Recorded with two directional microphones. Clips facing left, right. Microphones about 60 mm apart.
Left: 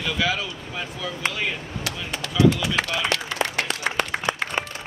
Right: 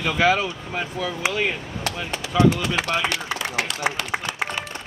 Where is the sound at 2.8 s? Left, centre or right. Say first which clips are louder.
Right 1 dB; centre.